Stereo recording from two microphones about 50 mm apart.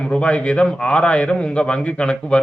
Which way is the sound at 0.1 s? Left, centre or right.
Left.